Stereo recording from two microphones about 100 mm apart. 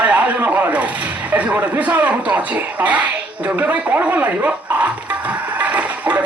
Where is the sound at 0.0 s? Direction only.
15° right (ahead or behind).